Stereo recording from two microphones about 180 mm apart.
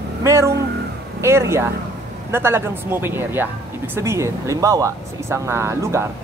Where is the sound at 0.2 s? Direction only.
15° right (ahead or behind).